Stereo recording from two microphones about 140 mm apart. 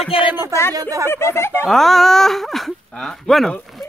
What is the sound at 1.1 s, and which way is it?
Speech, 20° left (ahead or behind).